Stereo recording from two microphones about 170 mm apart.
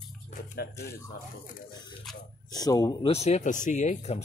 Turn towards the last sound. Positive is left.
turn(degrees=40)  # may be behind; listen again after turning